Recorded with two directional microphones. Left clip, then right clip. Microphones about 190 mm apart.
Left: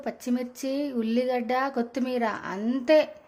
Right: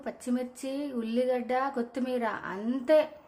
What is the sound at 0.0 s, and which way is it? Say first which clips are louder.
Speech: left 3 dB; 20° left (ahead or behind).